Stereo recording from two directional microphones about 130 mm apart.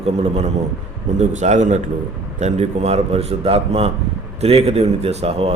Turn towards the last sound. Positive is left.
turn(degrees=-50)  # may be behind; listen again after turning